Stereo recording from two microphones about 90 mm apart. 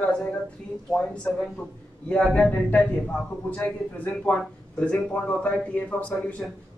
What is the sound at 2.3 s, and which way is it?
A man's voice, 15° left (ahead or behind).